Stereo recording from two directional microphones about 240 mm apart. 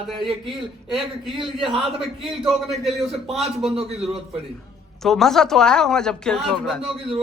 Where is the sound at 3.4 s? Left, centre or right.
Right.